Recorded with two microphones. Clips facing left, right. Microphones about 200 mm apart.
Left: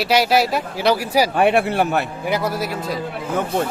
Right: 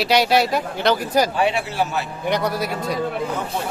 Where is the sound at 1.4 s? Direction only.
55° left (ahead or behind).